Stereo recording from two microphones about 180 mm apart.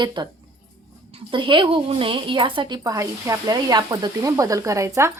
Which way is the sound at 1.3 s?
25° right (ahead or behind).